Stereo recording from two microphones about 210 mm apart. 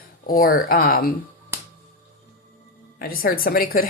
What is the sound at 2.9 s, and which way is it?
Speech, 45° left (ahead or behind).